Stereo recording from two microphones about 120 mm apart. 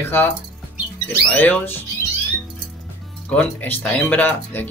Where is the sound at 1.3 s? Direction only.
15° left (ahead or behind).